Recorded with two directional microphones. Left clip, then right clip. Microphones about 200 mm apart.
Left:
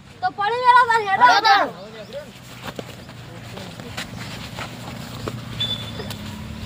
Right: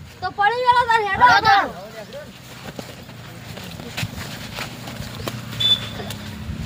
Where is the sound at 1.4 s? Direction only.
20° left (ahead or behind).